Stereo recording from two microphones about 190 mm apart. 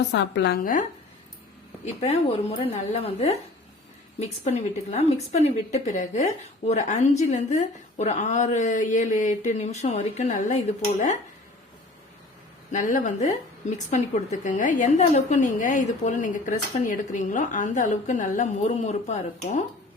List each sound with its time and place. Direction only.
0.1 s a woman's voice: 65° left (ahead or behind); by 0.9 s 45° left (ahead or behind)
1.8 s speech: 35° left (ahead or behind)
12.7 s speech: 40° left (ahead or behind)